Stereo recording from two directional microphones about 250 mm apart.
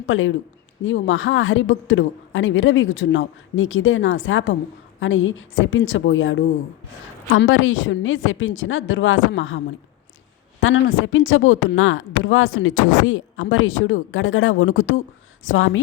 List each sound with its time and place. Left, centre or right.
0.0 s speech: left
10.6 s speech: left